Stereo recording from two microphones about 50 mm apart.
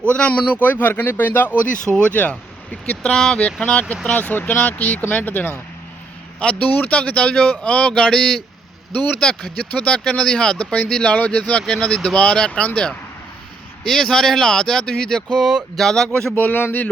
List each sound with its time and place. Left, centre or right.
0.1 s speech: left
0.6 s speech: left
1.9 s speech: left
3.1 s speech: centre
3.4 s speech: left
6.4 s speech: left
8.9 s speech: left
11.2 s speech: left; by 16.3 s centre
16.3 s speech: left